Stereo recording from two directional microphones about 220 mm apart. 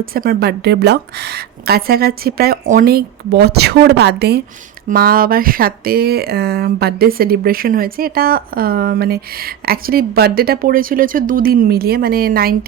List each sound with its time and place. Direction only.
0.0 s speech: 40° right (ahead or behind)